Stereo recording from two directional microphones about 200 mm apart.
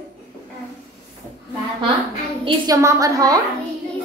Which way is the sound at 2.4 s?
20° right (ahead or behind).